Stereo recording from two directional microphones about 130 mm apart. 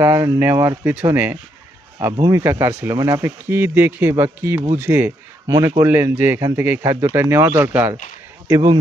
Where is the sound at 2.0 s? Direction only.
25° right (ahead or behind).